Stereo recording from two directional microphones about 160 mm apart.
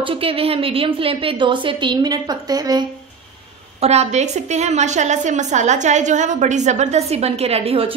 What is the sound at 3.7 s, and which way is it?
A woman's voice, 40° right (ahead or behind).